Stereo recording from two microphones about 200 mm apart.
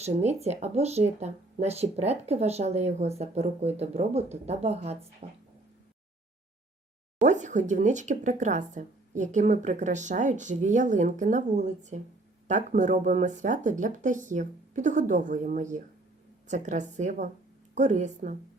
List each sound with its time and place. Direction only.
0.0 s speech: 30° right (ahead or behind)
7.2 s speech: 35° right (ahead or behind)